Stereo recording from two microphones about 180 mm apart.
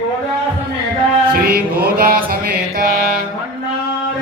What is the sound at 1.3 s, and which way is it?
Music, 55° right (ahead or behind).